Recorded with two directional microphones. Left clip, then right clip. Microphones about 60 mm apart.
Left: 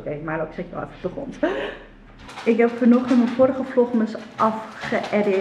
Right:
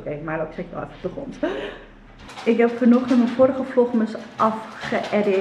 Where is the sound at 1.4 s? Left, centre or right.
Left.